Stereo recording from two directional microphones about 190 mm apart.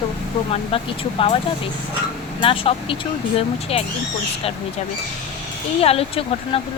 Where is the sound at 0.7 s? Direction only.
30° left (ahead or behind).